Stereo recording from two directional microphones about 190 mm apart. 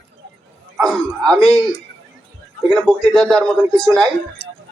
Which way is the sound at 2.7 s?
5° left (ahead or behind).